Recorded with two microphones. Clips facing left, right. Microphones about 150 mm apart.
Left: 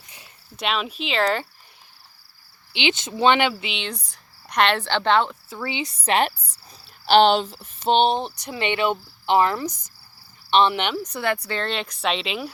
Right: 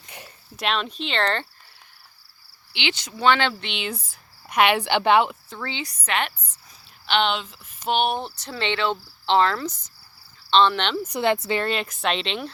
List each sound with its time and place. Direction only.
0.5 s speech: centre (ahead or behind)
2.7 s speech: 20° left (ahead or behind)
3.5 s speech: 5° left (ahead or behind)
5.5 s a sound: 10° left (ahead or behind)
6.0 s speech: 35° left (ahead or behind)
7.1 s a sound: 35° left (ahead or behind); by 11.0 s 10° left (ahead or behind)
11.0 s speech: 15° right (ahead or behind)
11.6 s speech: 5° right (ahead or behind)